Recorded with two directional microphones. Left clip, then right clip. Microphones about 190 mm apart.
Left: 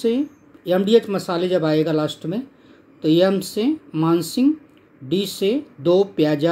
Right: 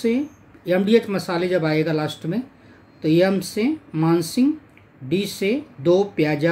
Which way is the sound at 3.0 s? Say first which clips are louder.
Left 1 dB; 20° right (ahead or behind).